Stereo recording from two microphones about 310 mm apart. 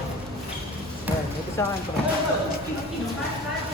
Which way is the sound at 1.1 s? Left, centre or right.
Centre.